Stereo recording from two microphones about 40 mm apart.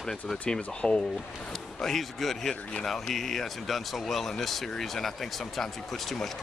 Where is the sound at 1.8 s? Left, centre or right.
Centre.